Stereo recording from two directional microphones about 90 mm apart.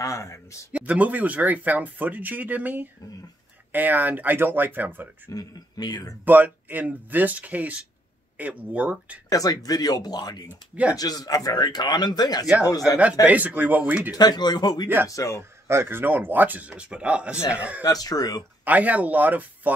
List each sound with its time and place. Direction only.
0.0 s speech: 35° left (ahead or behind)
0.7 s speech: 15° right (ahead or behind)
5.3 s speech: 45° left (ahead or behind)
6.2 s speech: 20° right (ahead or behind)
9.3 s speech: 40° left (ahead or behind)
13.3 s speech: 20° right (ahead or behind)
14.1 s speech: 50° left (ahead or behind)
15.0 s speech: 35° left (ahead or behind)
15.7 s speech: 25° right (ahead or behind)
17.8 s speech: 45° left (ahead or behind)
18.6 s speech: 15° right (ahead or behind)